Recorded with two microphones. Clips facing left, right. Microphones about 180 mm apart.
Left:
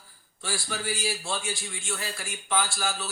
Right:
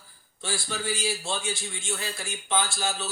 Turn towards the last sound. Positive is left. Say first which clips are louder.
# right 1 dB
turn(degrees=-20)  # may be behind; listen again after turning